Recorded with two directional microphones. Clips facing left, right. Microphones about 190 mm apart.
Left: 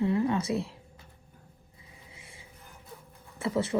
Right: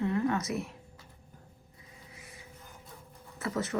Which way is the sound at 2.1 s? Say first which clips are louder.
Right 2 dB; 30° left (ahead or behind).